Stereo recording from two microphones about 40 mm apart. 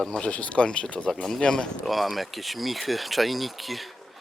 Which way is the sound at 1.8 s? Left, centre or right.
Centre.